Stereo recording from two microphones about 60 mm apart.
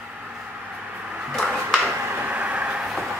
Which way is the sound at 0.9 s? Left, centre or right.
Right.